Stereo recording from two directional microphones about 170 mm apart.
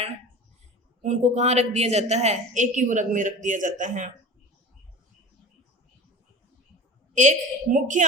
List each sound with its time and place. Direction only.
1.0 s a woman's voice: 45° right (ahead or behind)
7.2 s a woman's voice: 50° right (ahead or behind)